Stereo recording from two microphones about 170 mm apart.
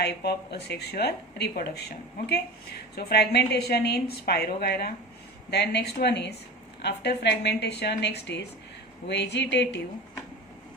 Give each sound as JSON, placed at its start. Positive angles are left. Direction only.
{"t": 0.0, "sound": "a woman's voice", "side_deg": 75}